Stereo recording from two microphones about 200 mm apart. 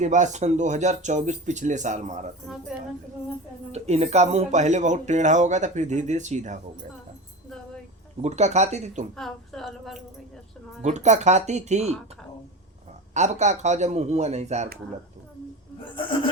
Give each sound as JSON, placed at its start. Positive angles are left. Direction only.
{"t": 0.0, "sound": "speech", "side_deg": -35}
{"t": 3.7, "sound": "speech", "side_deg": -35}
{"t": 8.2, "sound": "speech", "side_deg": -35}
{"t": 9.1, "sound": "a woman's voice", "side_deg": 0}
{"t": 10.8, "sound": "speech", "side_deg": -35}
{"t": 13.1, "sound": "speech", "side_deg": -35}
{"t": 15.8, "sound": "speech", "side_deg": 25}